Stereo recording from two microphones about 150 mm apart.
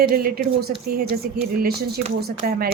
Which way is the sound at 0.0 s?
80° right.